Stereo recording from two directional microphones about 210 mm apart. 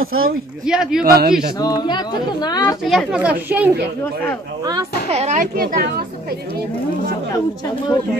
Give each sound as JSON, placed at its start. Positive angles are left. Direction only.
{"t": 0.0, "sound": "speech", "side_deg": -80}
{"t": 0.7, "sound": "speech", "side_deg": -5}
{"t": 1.0, "sound": "a man's voice", "side_deg": -45}
{"t": 1.6, "sound": "speech", "side_deg": 20}
{"t": 2.8, "sound": "speech", "side_deg": 0}
{"t": 5.1, "sound": "a child's voice", "side_deg": -30}